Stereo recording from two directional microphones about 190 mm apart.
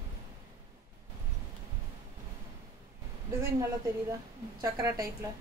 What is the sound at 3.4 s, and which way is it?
A woman's voice, 15° right (ahead or behind).